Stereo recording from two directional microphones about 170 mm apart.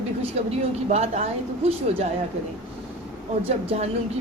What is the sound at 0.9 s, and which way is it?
Speech, 40° right (ahead or behind).